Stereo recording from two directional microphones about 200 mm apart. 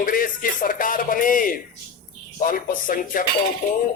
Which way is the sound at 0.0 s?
45° left (ahead or behind).